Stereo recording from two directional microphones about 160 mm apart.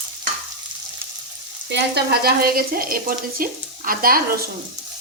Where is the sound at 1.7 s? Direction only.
80° right; by 4.2 s 65° right (ahead or behind).